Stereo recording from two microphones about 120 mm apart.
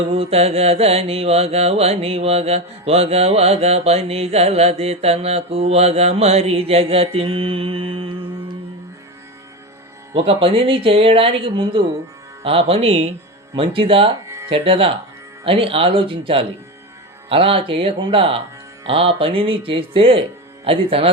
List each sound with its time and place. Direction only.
0.1 s mantra: 55° right (ahead or behind)
10.2 s speech: 50° right (ahead or behind)
12.4 s mantra: 50° right (ahead or behind)
13.6 s speech: 50° right (ahead or behind)
14.3 s music: 25° right (ahead or behind)
14.5 s speech: 50° right (ahead or behind)